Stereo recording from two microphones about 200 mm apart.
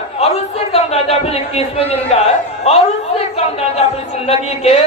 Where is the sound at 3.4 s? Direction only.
30° left (ahead or behind).